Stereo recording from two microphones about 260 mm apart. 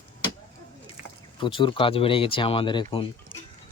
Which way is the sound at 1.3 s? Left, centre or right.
Centre.